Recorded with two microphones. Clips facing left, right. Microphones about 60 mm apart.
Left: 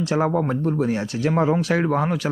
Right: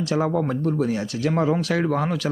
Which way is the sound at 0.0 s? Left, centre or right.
Left.